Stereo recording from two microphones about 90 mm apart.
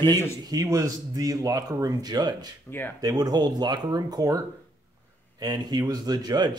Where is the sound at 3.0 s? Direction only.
45° right (ahead or behind).